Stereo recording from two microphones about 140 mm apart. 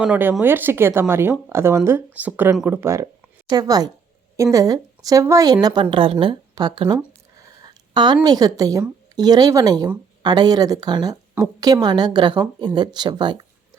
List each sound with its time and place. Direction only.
0.0 s a woman's voice: 10° right (ahead or behind); by 6.9 s 30° right (ahead or behind)
7.3 s a sound: 25° right (ahead or behind)
9.1 s a woman's voice: 30° right (ahead or behind)